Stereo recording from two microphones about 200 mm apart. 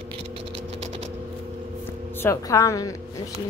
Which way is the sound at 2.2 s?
15° left (ahead or behind).